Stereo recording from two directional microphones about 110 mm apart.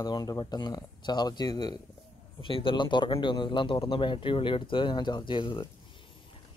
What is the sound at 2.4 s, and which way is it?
Speech, 50° left (ahead or behind).